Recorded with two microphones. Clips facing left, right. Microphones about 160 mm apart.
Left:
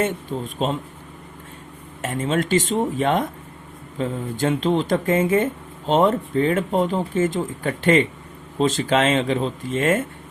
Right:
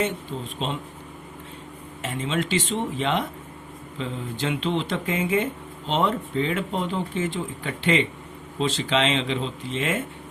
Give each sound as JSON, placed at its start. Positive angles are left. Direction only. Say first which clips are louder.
{"t": 0.0, "sound": "speech", "louder": "left 4 dB", "side_deg": 45}
{"t": 2.0, "sound": "speech", "louder": "left 4 dB", "side_deg": 45}